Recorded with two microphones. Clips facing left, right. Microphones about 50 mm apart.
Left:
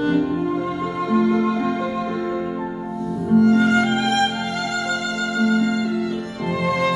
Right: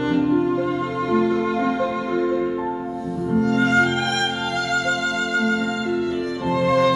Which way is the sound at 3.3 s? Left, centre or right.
Left.